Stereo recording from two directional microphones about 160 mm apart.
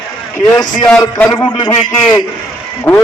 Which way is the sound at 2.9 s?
10° left (ahead or behind).